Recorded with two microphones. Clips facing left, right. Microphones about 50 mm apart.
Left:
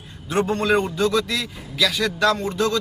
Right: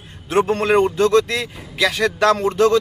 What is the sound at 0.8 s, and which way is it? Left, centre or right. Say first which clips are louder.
A man's voice: right 6 dB; right.